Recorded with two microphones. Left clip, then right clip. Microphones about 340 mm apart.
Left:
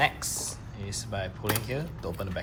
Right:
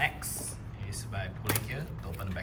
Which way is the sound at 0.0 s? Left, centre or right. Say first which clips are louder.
Left 5 dB; centre.